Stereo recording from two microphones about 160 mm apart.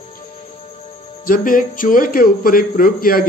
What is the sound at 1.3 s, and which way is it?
A man's voice, 55° left (ahead or behind).